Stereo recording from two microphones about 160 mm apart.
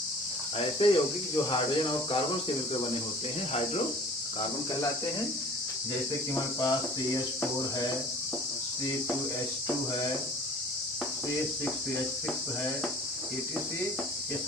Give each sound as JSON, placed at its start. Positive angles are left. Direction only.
{"t": 0.8, "sound": "speech", "side_deg": 35}
{"t": 6.6, "sound": "speech", "side_deg": 20}